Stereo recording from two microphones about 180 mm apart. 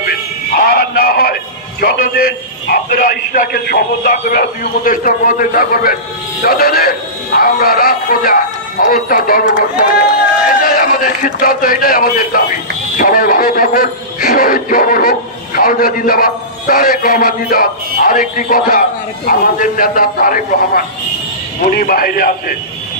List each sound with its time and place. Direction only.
0.6 s music: 55° left (ahead or behind)
2.7 s a man's voice: 55° left (ahead or behind)
10.6 s a man's voice: 50° left (ahead or behind)